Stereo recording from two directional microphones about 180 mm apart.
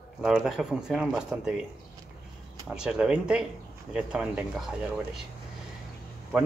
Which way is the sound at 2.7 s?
5° right (ahead or behind).